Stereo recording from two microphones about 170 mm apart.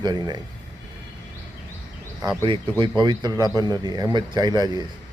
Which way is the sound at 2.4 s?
25° right (ahead or behind).